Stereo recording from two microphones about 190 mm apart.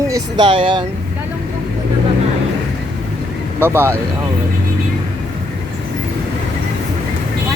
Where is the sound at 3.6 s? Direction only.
15° right (ahead or behind).